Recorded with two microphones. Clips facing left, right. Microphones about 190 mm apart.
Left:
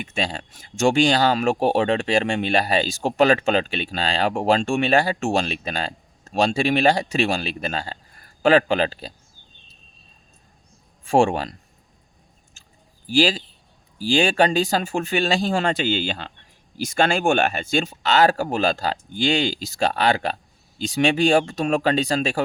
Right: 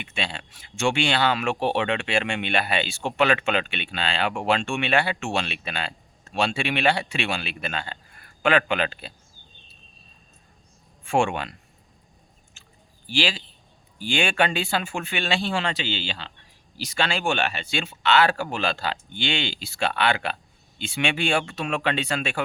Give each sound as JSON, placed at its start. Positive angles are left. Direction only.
{"t": 0.0, "sound": "speech", "side_deg": 40}
{"t": 11.0, "sound": "speech", "side_deg": 35}
{"t": 13.1, "sound": "speech", "side_deg": 40}